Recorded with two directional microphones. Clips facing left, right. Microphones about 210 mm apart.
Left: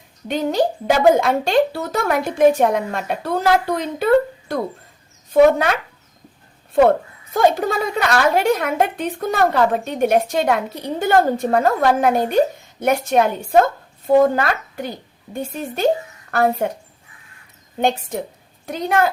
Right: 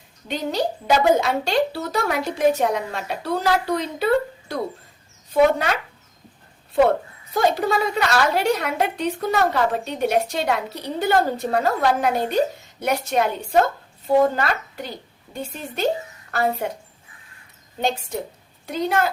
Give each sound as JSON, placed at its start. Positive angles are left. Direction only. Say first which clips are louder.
{"t": 0.3, "sound": "a woman's voice", "louder": "left 5 dB", "side_deg": 50}
{"t": 7.3, "sound": "a woman's voice", "louder": "left 3 dB", "side_deg": 50}
{"t": 15.3, "sound": "a woman's voice", "louder": "left 5 dB", "side_deg": 50}
{"t": 17.7, "sound": "a woman's voice", "louder": "left 4 dB", "side_deg": 50}